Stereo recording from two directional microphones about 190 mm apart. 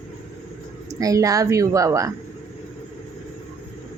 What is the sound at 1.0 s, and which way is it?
Speech, 15° right (ahead or behind).